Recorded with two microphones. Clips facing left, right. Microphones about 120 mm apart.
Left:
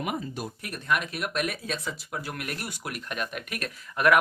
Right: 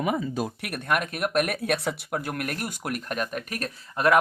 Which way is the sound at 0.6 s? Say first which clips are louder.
Left 1 dB; 60° right (ahead or behind).